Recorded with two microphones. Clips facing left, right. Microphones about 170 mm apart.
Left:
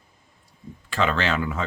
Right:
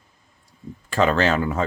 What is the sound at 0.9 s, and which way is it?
Speech, 40° right (ahead or behind).